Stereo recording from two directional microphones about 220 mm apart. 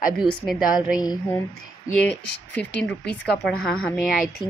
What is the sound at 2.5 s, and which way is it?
Speech, 5° left (ahead or behind).